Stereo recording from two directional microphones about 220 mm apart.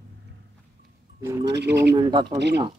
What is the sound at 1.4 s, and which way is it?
Owl, 50° right (ahead or behind).